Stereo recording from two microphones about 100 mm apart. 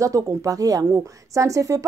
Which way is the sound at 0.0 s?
30° right (ahead or behind).